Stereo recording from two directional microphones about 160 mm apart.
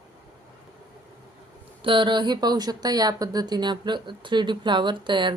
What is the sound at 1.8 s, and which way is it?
Speech, 30° right (ahead or behind).